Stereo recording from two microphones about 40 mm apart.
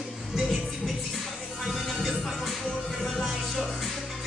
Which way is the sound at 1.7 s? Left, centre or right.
Centre.